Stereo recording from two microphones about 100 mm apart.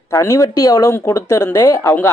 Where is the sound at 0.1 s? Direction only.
30° left (ahead or behind).